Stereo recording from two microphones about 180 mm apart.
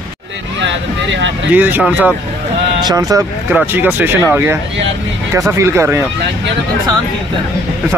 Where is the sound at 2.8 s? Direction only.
20° right (ahead or behind).